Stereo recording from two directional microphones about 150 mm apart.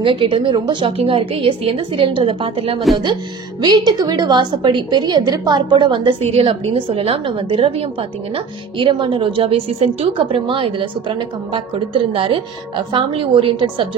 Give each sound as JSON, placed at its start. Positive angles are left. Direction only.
{"t": 0.0, "sound": "a woman's voice", "side_deg": -35}
{"t": 3.6, "sound": "a woman's voice", "side_deg": -30}